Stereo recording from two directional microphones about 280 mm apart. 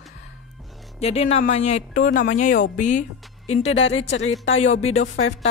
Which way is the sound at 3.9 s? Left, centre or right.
Left.